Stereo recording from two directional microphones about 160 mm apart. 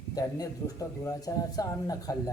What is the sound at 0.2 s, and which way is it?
Speech, 20° left (ahead or behind).